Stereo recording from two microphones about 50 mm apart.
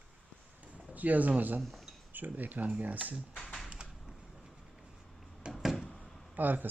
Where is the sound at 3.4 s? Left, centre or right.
Centre.